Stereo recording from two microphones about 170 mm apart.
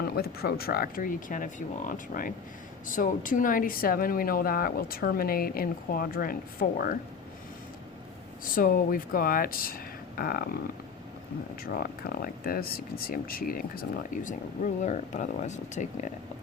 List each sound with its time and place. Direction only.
0.2 s speech: 65° left (ahead or behind)
8.5 s speech: 55° left (ahead or behind)
11.6 s speech: 60° left (ahead or behind); by 16.1 s 45° left (ahead or behind)